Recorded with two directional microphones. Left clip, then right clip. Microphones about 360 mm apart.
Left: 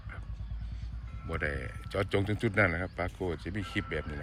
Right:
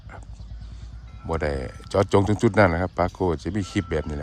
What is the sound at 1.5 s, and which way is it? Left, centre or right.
Speech, right.